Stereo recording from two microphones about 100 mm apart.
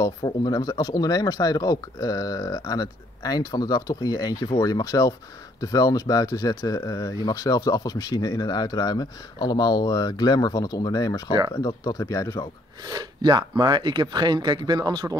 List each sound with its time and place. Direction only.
0.0 s speech: 40° left (ahead or behind)
12.8 s speech: 45° right (ahead or behind)